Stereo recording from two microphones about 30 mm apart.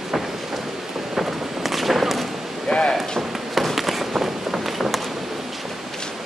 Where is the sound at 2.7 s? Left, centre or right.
Centre.